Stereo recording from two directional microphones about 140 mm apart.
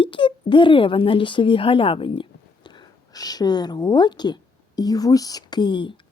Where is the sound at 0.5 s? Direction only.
40° left (ahead or behind).